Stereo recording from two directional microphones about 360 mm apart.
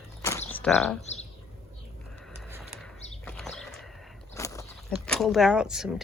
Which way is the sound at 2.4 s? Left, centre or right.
Centre.